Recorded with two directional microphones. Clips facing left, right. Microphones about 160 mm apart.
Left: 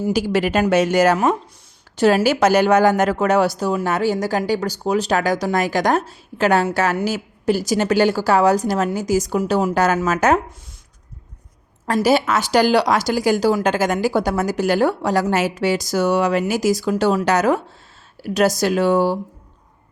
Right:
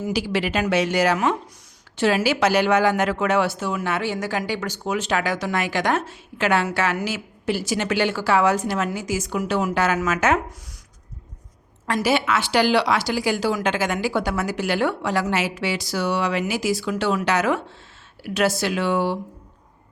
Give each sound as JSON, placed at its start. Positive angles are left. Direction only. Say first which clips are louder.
{"t": 0.1, "sound": "speech", "louder": "left 5 dB", "side_deg": 45}
{"t": 12.0, "sound": "speech", "louder": "left 4 dB", "side_deg": 40}